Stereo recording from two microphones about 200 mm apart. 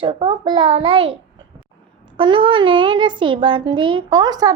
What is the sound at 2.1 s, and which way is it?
A child's voice, 25° right (ahead or behind).